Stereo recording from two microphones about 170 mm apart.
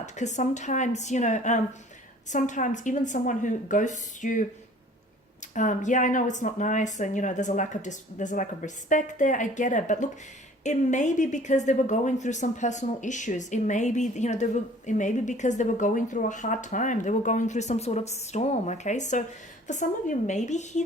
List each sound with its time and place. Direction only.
0.0 s speech: 45° left (ahead or behind)
5.5 s speech: 45° left (ahead or behind)